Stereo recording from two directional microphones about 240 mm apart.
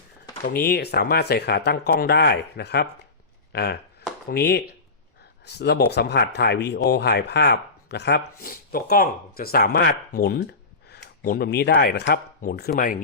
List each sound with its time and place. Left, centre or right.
0.4 s speech: left